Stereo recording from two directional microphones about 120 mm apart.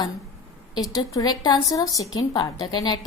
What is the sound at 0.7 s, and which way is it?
A woman's voice, 30° left (ahead or behind).